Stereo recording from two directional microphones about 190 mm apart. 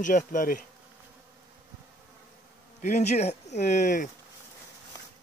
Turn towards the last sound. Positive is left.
turn(degrees=40)  # may be behind; listen again after turning